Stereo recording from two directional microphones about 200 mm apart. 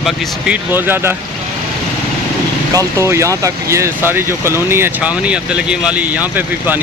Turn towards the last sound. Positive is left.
turn(degrees=-10)  # may be behind; listen again after turning